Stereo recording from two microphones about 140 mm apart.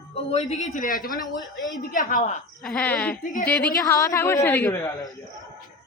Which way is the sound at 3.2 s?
70° left (ahead or behind).